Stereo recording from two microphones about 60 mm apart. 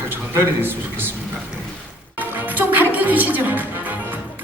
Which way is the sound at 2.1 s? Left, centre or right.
Right.